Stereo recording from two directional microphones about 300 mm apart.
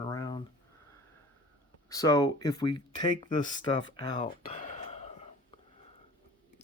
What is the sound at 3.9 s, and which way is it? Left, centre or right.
Whispering, centre.